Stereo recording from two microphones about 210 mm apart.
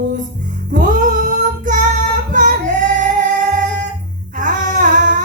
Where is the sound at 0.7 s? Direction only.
40° right (ahead or behind).